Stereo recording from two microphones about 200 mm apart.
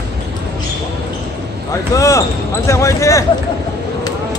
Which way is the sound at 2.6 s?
15° left (ahead or behind).